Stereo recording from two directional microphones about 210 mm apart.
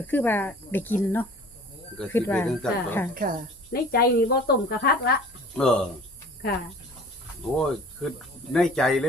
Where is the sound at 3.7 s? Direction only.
50° left (ahead or behind).